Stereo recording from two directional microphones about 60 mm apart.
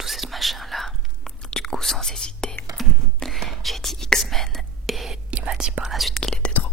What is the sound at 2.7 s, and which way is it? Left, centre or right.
Whispering, centre.